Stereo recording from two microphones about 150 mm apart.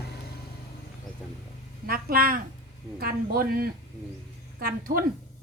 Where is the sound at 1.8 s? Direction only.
80° right.